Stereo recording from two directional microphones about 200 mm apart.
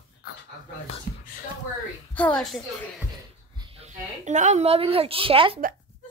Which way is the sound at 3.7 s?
35° right (ahead or behind).